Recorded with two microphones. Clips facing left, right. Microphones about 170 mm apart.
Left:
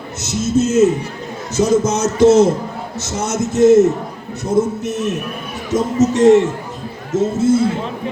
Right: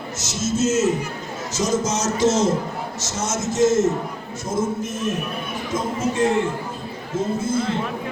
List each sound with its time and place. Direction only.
0.2 s speech: 60° left (ahead or behind); by 7.5 s 75° left (ahead or behind)